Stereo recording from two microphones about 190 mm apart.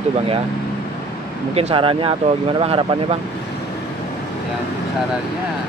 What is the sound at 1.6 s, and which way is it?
Speech, 30° right (ahead or behind).